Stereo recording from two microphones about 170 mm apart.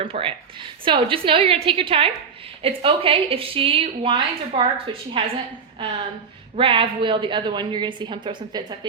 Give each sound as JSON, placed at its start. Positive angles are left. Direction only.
{"t": 0.0, "sound": "a woman's voice", "side_deg": -30}
{"t": 6.6, "sound": "a woman's voice", "side_deg": -30}